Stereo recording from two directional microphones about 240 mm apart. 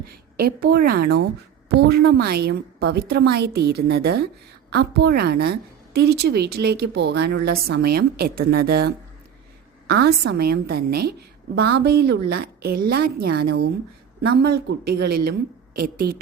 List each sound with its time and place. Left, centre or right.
0.0 s a woman's voice: right